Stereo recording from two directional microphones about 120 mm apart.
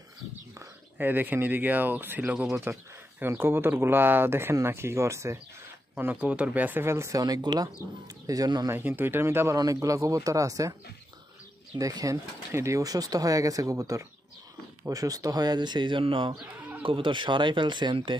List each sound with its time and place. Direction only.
0.6 s speech: 15° right (ahead or behind)
5.9 s speech: 15° right (ahead or behind); by 8.6 s 35° right (ahead or behind)
8.6 s speech: 15° right (ahead or behind)
11.8 s speech: 30° right (ahead or behind); by 16.3 s 45° right (ahead or behind)
16.3 s sheep: 10° right (ahead or behind)
16.8 s speech: 45° right (ahead or behind)